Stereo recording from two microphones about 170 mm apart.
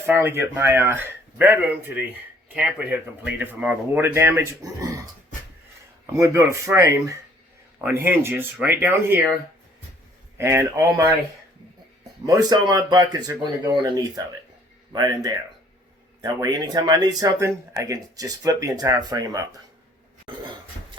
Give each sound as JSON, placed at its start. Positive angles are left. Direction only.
{"t": 0.0, "sound": "speech", "side_deg": -10}
{"t": 6.1, "sound": "speech", "side_deg": -15}
{"t": 10.3, "sound": "speech", "side_deg": -15}
{"t": 12.2, "sound": "speech", "side_deg": -20}
{"t": 20.3, "sound": "a sound", "side_deg": -30}